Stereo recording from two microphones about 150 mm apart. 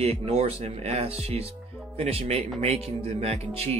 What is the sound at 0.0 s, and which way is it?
A man's voice, 40° right (ahead or behind).